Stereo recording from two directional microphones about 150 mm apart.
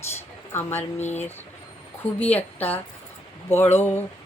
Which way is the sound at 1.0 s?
50° left (ahead or behind).